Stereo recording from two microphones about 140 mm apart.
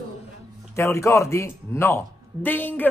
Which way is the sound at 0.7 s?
20° left (ahead or behind).